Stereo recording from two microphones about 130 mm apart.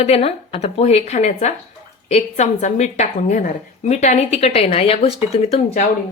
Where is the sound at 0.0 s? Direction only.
50° left (ahead or behind).